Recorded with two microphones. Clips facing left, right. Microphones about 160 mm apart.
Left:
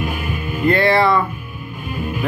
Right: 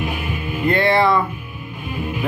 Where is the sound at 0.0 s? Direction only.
45° left (ahead or behind).